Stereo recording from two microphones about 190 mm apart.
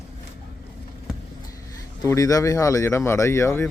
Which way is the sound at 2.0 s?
15° left (ahead or behind).